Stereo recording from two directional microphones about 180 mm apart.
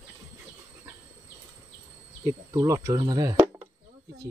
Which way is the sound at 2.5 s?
20° right (ahead or behind).